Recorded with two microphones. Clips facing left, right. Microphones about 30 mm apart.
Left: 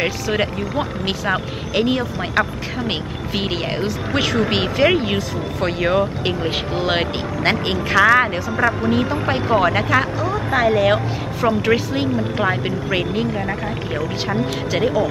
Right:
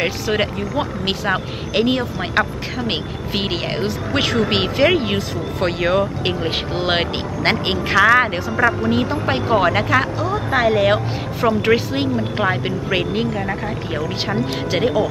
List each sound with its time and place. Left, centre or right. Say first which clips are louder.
0.0 s speech: right 1 dB; centre
7.9 s speech: even; centre
14.7 s speech: right 1 dB; centre